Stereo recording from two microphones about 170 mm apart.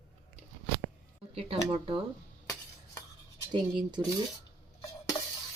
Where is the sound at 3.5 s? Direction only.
25° right (ahead or behind).